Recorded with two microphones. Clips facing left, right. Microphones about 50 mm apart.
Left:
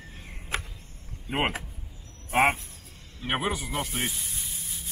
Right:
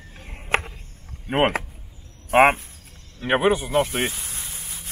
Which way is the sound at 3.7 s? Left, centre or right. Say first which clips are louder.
Right 9 dB; right.